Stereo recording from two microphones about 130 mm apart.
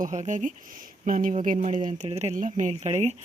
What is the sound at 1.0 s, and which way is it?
Speech, 90° right.